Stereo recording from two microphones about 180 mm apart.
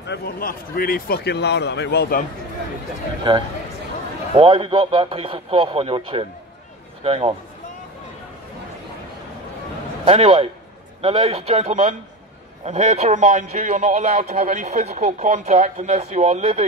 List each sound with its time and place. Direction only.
0.0 s a man's voice: 60° left (ahead or behind)
3.3 s a man's voice: 25° right (ahead or behind)
10.0 s a man's voice: 35° right (ahead or behind)